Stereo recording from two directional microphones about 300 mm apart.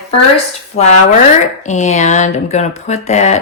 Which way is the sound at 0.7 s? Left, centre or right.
Left.